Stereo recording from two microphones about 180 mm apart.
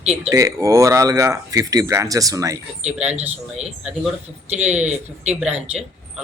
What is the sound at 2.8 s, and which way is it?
Speech, 5° right (ahead or behind).